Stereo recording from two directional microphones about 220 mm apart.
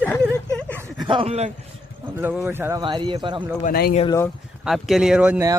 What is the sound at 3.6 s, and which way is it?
Speech, 45° left (ahead or behind).